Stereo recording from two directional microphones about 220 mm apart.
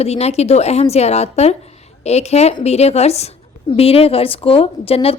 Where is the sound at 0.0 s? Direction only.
30° left (ahead or behind).